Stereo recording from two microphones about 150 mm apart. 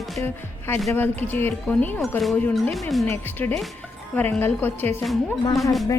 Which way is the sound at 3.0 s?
15° left (ahead or behind).